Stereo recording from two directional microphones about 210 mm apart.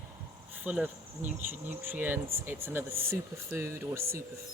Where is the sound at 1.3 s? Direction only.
10° right (ahead or behind).